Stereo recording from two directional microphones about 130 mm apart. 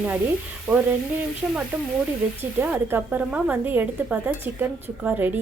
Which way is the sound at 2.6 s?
15° right (ahead or behind).